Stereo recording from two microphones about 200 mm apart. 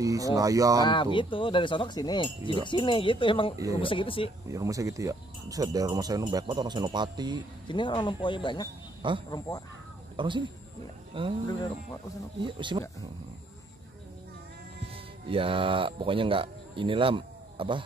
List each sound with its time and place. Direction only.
0.0 s speech: 15° right (ahead or behind)
0.8 s speech: 25° left (ahead or behind)
3.5 s speech: 15° right (ahead or behind)
3.8 s speech: 25° left (ahead or behind)
4.5 s speech: 15° right (ahead or behind)
7.6 s speech: 25° left (ahead or behind)
9.0 s speech: 25° right (ahead or behind)
11.4 s speech: 20° left (ahead or behind)
12.4 s speech: 25° right (ahead or behind)
15.2 s speech: 25° right (ahead or behind)